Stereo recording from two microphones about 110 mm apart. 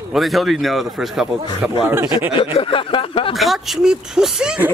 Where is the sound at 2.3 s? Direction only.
55° left (ahead or behind).